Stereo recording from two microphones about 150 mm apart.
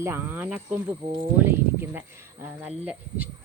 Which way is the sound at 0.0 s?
15° right (ahead or behind).